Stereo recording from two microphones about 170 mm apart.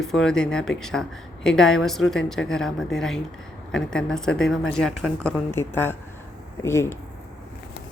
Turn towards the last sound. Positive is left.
turn(degrees=15)  # may be behind; listen again after turning